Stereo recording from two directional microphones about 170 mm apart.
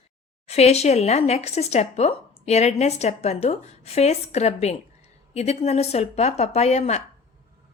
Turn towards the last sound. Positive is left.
turn(degrees=40)  # may be behind; listen again after turning